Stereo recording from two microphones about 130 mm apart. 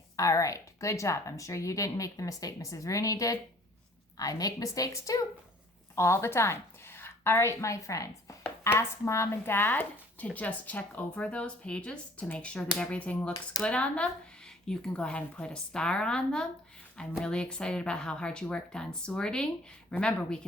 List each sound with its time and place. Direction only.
0.2 s a woman's voice: 25° left (ahead or behind); by 20.4 s 5° left (ahead or behind)